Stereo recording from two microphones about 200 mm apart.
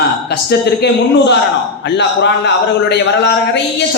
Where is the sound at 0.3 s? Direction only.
55° left (ahead or behind).